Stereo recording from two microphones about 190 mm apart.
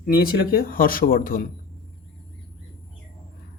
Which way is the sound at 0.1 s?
50° left (ahead or behind).